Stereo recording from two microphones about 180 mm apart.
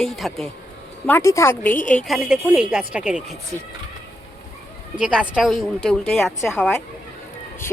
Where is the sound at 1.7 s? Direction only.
45° left (ahead or behind).